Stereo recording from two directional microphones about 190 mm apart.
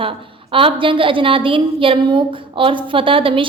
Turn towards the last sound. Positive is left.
turn(degrees=-30)  # may be behind; listen again after turning